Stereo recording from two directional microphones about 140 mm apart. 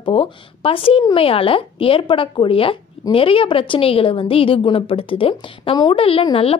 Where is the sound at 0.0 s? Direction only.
40° left (ahead or behind).